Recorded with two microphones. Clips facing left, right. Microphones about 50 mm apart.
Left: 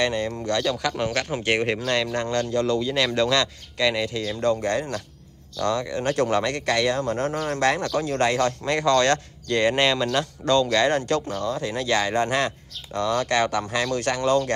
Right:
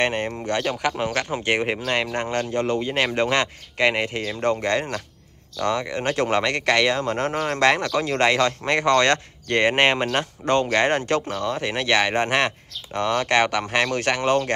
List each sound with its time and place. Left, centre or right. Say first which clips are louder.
0.0 s speech: right 1 dB; right
0.9 s speech: right 1 dB; centre
1.9 s speech: even; right